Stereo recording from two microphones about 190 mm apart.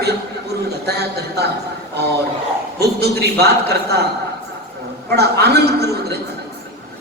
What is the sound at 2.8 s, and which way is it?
A man's voice, 60° right (ahead or behind).